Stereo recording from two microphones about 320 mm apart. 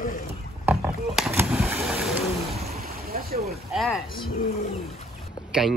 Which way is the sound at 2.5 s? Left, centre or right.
Right.